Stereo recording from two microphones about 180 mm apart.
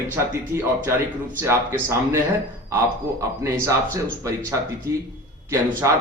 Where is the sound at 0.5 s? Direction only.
15° right (ahead or behind).